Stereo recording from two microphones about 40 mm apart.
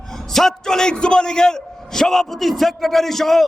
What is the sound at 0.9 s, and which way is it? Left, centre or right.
A man's voice, left.